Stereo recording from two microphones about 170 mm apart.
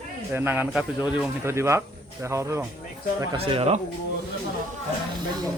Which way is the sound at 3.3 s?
35° right (ahead or behind).